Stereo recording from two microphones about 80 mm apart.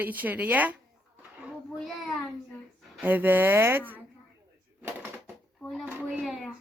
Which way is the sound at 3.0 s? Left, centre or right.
Right.